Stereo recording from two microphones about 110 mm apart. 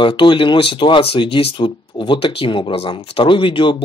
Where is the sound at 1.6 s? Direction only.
45° left (ahead or behind).